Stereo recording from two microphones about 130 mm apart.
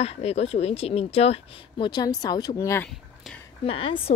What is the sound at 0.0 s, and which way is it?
Speech, 50° left (ahead or behind).